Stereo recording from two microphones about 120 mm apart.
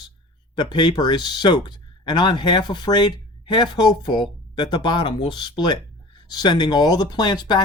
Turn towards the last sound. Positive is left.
turn(degrees=35)  # may be behind; listen again after turning